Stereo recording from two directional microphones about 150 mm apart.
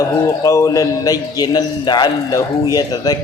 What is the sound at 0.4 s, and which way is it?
A man's voice, 20° left (ahead or behind).